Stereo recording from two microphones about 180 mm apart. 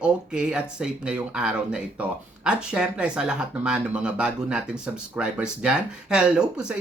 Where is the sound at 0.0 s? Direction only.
5° right (ahead or behind).